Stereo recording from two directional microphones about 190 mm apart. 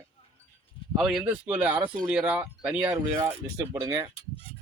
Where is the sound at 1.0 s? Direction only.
5° right (ahead or behind).